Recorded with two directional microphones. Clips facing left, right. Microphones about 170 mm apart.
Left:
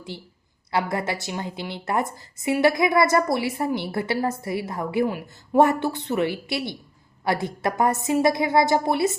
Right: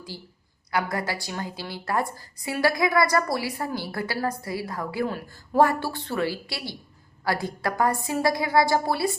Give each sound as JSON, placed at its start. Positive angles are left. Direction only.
{"t": 0.1, "sound": "a woman's voice", "side_deg": 25}